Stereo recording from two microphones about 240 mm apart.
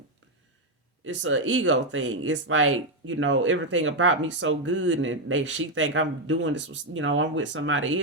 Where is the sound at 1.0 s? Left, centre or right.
Right.